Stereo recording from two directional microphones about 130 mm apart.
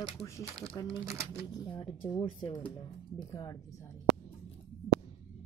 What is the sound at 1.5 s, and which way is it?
Speech, 35° left (ahead or behind).